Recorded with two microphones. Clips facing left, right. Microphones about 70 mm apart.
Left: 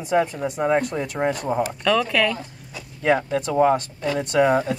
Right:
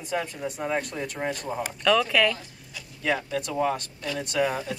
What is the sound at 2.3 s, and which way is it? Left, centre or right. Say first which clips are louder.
Speech: left 7 dB; left.